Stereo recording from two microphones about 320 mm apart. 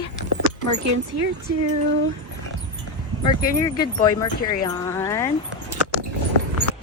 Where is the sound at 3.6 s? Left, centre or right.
Centre.